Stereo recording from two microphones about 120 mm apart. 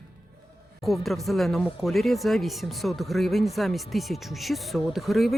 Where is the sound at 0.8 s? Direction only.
Centre (ahead or behind).